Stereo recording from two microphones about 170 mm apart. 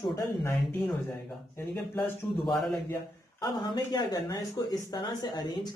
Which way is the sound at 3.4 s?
20° left (ahead or behind).